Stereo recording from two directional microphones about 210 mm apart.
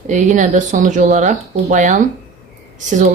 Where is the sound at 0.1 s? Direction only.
35° right (ahead or behind).